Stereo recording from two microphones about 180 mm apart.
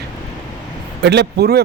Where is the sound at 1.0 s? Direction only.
70° right (ahead or behind).